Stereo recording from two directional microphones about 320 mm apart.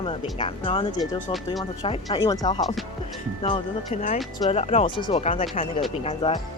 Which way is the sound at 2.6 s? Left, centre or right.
Centre.